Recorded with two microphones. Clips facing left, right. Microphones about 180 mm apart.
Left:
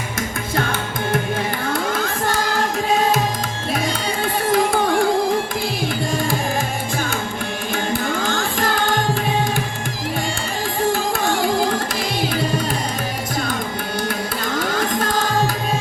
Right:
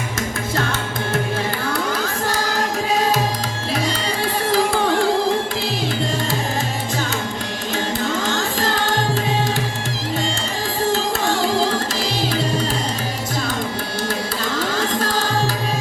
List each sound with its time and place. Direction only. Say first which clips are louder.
0.5 s music: left 2 dB; 55° left (ahead or behind)
1.7 s crowd: left 1 dB; 55° left (ahead or behind)
4.5 s music: even; 50° left (ahead or behind)
8.0 s music: even; 55° left (ahead or behind)
11.9 s music: even; 55° left (ahead or behind)
14.7 s music: left 1 dB; 50° left (ahead or behind)